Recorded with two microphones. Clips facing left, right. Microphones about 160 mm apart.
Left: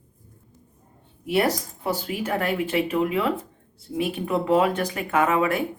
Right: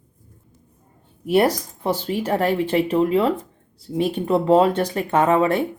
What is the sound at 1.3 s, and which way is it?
Speech, 30° right (ahead or behind).